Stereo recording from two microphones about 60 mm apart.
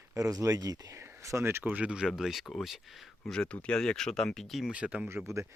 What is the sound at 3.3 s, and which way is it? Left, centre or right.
Speech, centre.